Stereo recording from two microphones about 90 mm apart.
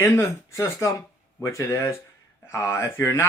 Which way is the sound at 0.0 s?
30° left (ahead or behind).